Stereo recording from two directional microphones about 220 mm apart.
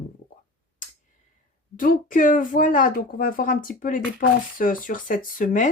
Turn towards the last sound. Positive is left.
turn(degrees=35)  # may be behind; listen again after turning